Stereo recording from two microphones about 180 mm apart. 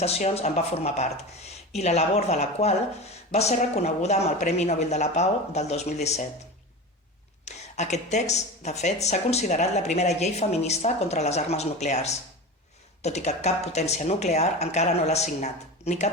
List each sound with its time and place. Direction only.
0.0 s a woman's voice: 35° left (ahead or behind)
7.4 s a woman's voice: 40° left (ahead or behind)